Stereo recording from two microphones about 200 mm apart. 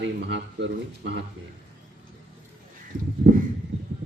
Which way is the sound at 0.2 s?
65° right (ahead or behind).